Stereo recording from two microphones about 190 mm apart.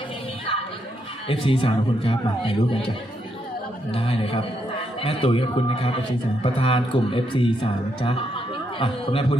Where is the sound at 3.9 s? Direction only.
30° left (ahead or behind).